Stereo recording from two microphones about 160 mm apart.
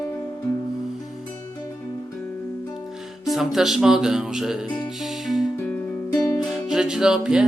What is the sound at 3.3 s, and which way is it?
Speech, centre (ahead or behind).